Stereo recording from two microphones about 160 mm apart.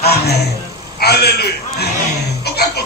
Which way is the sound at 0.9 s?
90° left.